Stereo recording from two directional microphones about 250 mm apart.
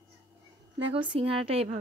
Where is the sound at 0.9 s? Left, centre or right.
Right.